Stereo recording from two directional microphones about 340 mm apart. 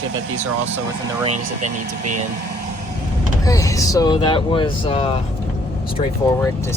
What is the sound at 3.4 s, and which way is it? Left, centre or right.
Speech, centre.